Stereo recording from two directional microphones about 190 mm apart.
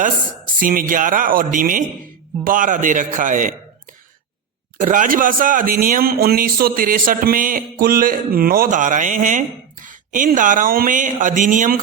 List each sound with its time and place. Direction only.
0.6 s speech: 45° right (ahead or behind)
4.8 s speech: 45° right (ahead or behind)